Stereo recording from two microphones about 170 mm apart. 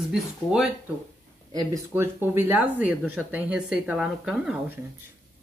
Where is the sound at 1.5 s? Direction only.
15° right (ahead or behind).